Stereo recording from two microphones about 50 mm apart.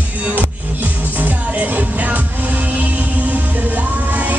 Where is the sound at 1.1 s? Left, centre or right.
Right.